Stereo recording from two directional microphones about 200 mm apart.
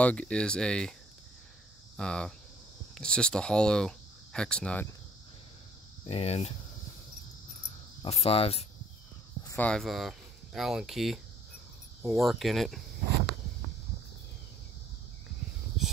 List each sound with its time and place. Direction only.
0.0 s speech: 5° left (ahead or behind)
2.0 s speech: 5° left (ahead or behind)
6.0 s speech: 30° left (ahead or behind)
8.0 s speech: 30° left (ahead or behind)
9.4 s a sound: 15° left (ahead or behind)
9.7 s speech: centre (ahead or behind)